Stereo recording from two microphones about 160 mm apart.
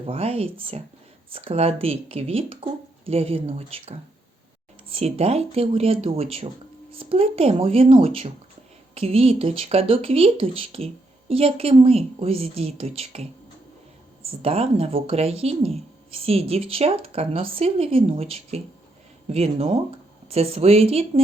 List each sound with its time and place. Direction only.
0.0 s speech: 35° right (ahead or behind)
14.3 s speech: 35° right (ahead or behind)